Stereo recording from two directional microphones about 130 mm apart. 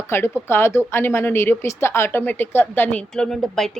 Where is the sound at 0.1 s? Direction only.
20° left (ahead or behind).